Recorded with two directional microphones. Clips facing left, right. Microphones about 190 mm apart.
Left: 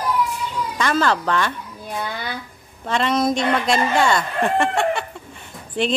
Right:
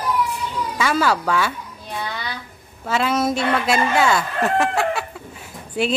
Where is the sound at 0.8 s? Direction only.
5° right (ahead or behind).